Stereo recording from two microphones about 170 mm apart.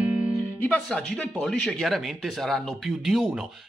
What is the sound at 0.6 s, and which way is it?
Speech, 10° left (ahead or behind).